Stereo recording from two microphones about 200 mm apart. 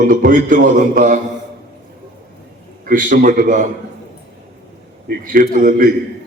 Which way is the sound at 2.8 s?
40° right (ahead or behind).